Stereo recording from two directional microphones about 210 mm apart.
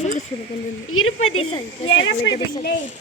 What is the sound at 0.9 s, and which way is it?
Speech, 80° left.